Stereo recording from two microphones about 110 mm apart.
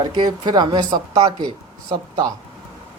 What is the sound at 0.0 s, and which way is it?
Speech, 40° right (ahead or behind).